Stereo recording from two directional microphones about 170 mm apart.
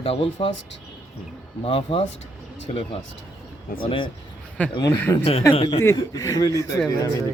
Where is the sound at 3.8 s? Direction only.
30° left (ahead or behind).